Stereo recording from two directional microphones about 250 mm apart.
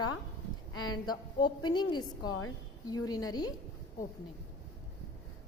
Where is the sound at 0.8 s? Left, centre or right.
Centre.